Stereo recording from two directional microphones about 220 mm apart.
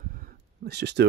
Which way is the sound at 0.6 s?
50° right (ahead or behind).